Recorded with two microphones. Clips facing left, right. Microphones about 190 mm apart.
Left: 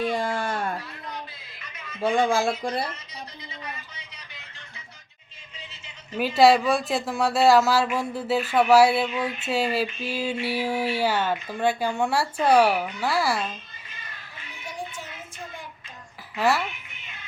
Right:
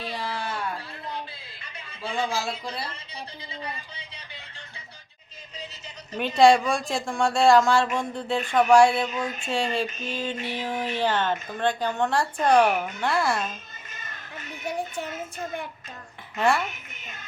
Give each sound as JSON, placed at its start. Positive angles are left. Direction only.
{"t": 0.0, "sound": "a sound", "side_deg": 50}
{"t": 2.0, "sound": "speech", "side_deg": 50}
{"t": 3.5, "sound": "speech", "side_deg": -30}
{"t": 6.1, "sound": "speech", "side_deg": 5}
{"t": 9.0, "sound": "a sound", "side_deg": -40}
{"t": 9.5, "sound": "speech", "side_deg": 5}
{"t": 13.9, "sound": "children playing", "side_deg": -45}
{"t": 14.7, "sound": "child singing", "side_deg": -60}
{"t": 16.3, "sound": "speech", "side_deg": 0}
{"t": 16.6, "sound": "a sound", "side_deg": -45}